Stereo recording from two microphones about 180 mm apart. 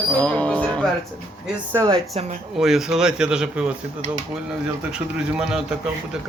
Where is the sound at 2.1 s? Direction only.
40° right (ahead or behind).